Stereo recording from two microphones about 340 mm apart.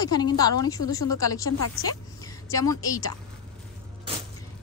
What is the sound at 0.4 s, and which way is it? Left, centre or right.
A woman's voice, centre.